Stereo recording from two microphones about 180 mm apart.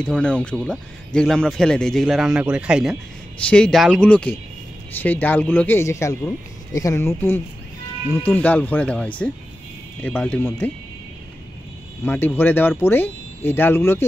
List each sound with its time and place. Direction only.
0.0 s speech: 5° left (ahead or behind)
12.0 s speech: 10° left (ahead or behind)